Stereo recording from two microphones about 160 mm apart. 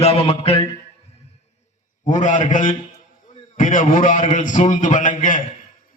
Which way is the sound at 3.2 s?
50° left (ahead or behind).